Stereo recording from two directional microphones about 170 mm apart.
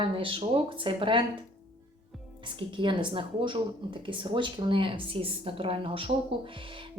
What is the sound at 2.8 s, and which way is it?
A woman's voice, 30° right (ahead or behind).